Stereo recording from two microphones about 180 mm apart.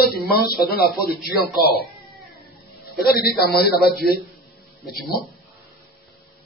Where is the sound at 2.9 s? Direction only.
60° left (ahead or behind).